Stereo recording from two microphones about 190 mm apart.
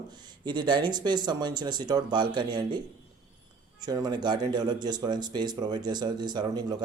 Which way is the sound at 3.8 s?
20° right (ahead or behind).